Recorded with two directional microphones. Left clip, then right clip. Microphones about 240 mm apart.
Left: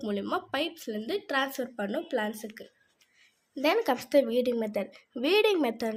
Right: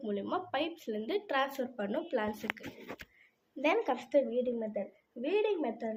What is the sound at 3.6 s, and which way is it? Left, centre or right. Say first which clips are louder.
A woman's voice: left 4 dB; left.